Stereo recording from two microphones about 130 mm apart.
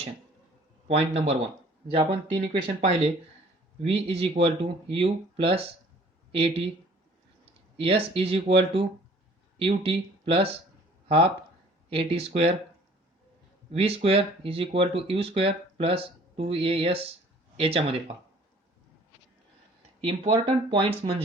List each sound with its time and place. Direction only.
0.9 s speech: 55° right (ahead or behind)
7.8 s speech: 50° right (ahead or behind)
11.9 s speech: 50° right (ahead or behind)
13.7 s speech: 50° right (ahead or behind)
20.0 s speech: 45° right (ahead or behind)